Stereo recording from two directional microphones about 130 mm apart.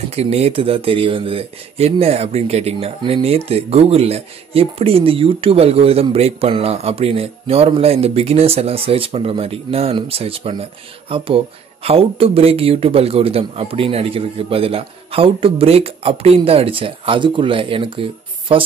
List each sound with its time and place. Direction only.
0.1 s speech: 55° right (ahead or behind)